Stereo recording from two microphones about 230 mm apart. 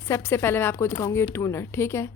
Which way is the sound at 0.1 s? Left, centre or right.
Centre.